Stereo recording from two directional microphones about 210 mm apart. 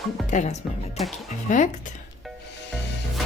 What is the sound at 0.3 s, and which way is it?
Speech, 35° left (ahead or behind).